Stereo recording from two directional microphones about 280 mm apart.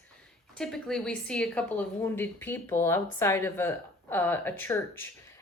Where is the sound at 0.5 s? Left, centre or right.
Centre.